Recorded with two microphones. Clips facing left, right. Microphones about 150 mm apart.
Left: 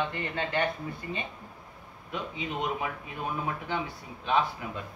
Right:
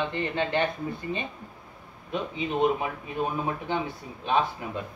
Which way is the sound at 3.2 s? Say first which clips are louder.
Right 5 dB; 25° right (ahead or behind).